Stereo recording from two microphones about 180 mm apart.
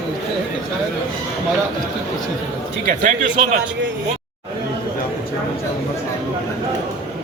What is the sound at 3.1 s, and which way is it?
Speech, 45° right (ahead or behind).